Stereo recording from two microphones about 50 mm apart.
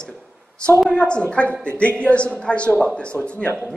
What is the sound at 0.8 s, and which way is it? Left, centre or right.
A woman's voice, left.